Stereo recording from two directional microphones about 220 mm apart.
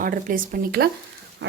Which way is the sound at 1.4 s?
55° right (ahead or behind).